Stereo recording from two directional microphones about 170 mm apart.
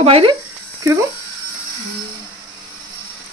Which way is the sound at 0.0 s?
35° right (ahead or behind).